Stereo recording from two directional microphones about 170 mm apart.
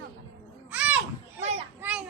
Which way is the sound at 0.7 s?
10° right (ahead or behind).